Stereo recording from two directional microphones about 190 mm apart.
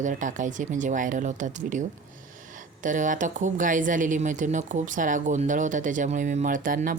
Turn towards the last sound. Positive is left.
turn(degrees=-45)  # may be behind; listen again after turning